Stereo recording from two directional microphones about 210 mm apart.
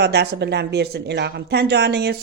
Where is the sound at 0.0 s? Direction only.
50° right (ahead or behind).